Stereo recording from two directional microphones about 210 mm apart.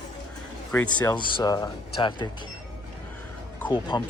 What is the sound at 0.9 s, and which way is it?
Speech, 20° left (ahead or behind).